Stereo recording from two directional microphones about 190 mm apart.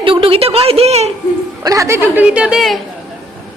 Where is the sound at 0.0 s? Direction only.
30° right (ahead or behind).